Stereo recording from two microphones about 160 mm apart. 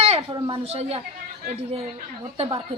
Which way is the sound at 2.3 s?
35° right (ahead or behind).